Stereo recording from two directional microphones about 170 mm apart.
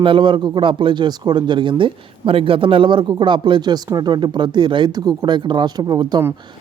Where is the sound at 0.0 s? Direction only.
30° right (ahead or behind).